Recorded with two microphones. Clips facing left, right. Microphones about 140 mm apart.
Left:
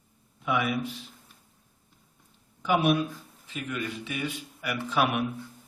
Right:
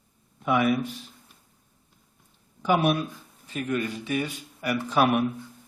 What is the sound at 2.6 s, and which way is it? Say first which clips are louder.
Speech: right 1 dB; 45° right (ahead or behind).